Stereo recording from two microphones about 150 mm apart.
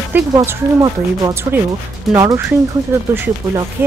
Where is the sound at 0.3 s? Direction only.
25° right (ahead or behind).